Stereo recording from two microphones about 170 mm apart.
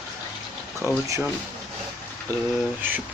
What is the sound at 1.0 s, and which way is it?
Speech, 20° right (ahead or behind).